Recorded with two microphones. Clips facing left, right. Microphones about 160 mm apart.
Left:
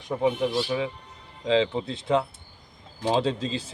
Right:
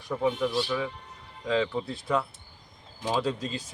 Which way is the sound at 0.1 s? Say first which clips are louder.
Left 3 dB; 20° left (ahead or behind).